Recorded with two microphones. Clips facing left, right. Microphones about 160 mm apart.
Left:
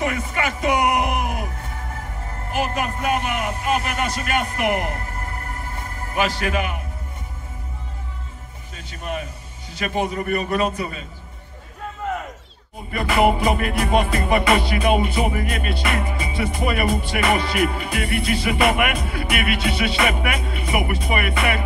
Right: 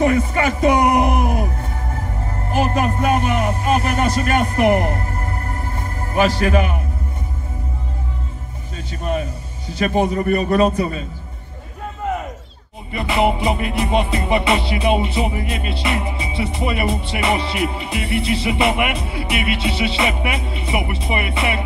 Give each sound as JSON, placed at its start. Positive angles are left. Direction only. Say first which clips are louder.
{"t": 0.0, "sound": "a man's voice", "louder": "right 7 dB", "side_deg": -35}
{"t": 9.0, "sound": "music", "louder": "right 6 dB", "side_deg": -35}
{"t": 9.8, "sound": "a man's voice", "louder": "right 6 dB", "side_deg": -35}
{"t": 12.9, "sound": "music", "louder": "even", "side_deg": -25}